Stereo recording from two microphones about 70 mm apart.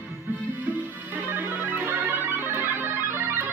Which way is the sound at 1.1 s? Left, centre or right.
Right.